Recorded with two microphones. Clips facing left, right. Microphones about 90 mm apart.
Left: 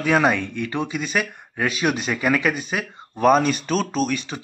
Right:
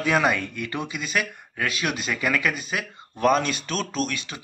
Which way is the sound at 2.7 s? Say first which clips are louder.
Left 3 dB; 35° left (ahead or behind).